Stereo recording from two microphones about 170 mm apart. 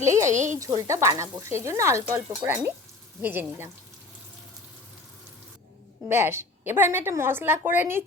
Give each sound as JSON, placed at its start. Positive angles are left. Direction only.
{"t": 0.0, "sound": "speech", "side_deg": -15}
{"t": 0.3, "sound": "speech", "side_deg": -45}
{"t": 0.5, "sound": "speech", "side_deg": -20}
{"t": 6.1, "sound": "speech", "side_deg": -15}